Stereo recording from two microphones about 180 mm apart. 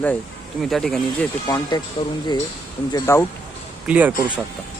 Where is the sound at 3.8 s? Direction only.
10° right (ahead or behind).